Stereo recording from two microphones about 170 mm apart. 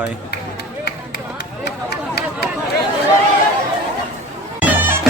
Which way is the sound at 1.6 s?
75° left (ahead or behind).